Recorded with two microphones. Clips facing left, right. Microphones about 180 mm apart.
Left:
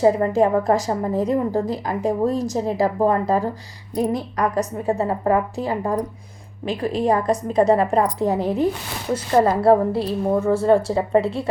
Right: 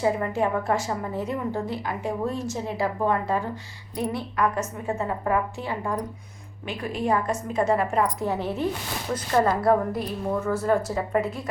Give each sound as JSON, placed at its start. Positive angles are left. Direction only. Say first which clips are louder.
{"t": 0.0, "sound": "a woman's voice", "louder": "left 7 dB", "side_deg": 35}